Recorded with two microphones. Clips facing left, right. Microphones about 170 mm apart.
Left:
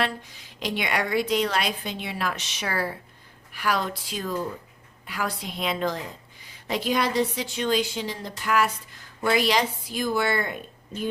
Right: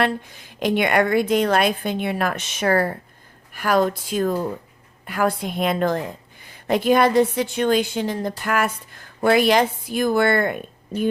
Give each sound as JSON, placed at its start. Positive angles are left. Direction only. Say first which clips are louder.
{"t": 0.0, "sound": "a woman's voice", "louder": "right 6 dB", "side_deg": -55}